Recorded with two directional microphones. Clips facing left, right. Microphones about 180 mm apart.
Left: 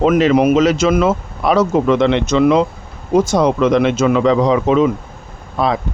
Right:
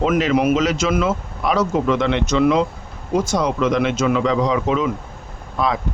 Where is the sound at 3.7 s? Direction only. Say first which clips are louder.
Left 5 dB; 30° left (ahead or behind).